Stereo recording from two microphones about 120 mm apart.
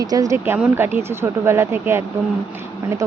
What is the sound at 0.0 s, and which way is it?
Speech, 30° right (ahead or behind).